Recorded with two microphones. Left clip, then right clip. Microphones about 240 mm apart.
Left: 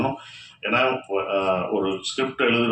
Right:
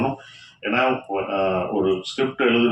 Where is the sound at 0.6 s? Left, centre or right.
Left.